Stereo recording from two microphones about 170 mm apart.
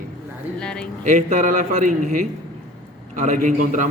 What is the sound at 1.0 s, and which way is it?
A man's voice, 45° right (ahead or behind).